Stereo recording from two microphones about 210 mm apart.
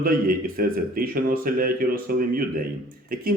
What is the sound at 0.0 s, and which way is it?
Speech, 45° right (ahead or behind).